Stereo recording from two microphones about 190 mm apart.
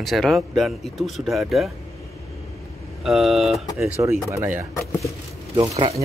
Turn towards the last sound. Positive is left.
turn(degrees=-30)  # may be behind; listen again after turning